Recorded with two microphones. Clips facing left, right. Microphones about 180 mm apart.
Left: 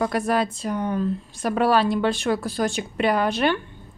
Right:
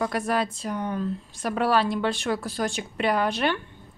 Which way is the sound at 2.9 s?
55° left (ahead or behind).